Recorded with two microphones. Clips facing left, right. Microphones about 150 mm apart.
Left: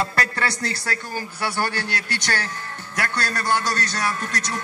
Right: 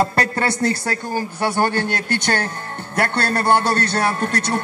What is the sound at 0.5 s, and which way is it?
A man's voice, 50° right (ahead or behind).